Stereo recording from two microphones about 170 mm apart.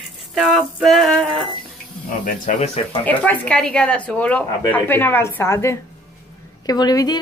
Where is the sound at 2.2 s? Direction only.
50° left (ahead or behind).